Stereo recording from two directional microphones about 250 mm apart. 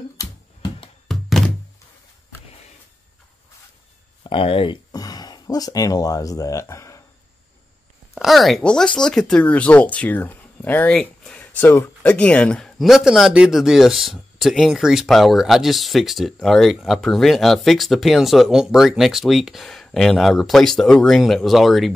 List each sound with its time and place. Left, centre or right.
0.2 s a sound: centre
1.0 s thunk: centre
4.2 s speech: left
8.1 s speech: centre